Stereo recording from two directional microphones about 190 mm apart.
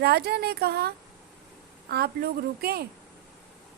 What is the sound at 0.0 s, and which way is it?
A woman's voice, 55° right (ahead or behind).